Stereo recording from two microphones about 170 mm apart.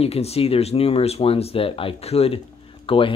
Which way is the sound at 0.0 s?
35° left (ahead or behind).